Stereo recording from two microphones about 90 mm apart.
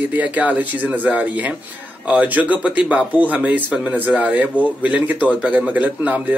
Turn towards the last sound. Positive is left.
turn(degrees=-15)  # may be behind; listen again after turning